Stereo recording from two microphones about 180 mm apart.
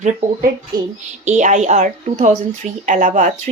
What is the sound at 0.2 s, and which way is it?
Speech, 45° right (ahead or behind).